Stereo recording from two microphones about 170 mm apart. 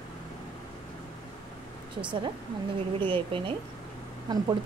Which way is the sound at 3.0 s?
30° right (ahead or behind).